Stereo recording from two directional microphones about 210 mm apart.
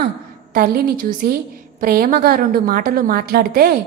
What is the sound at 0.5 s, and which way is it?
A woman's voice, 45° right (ahead or behind).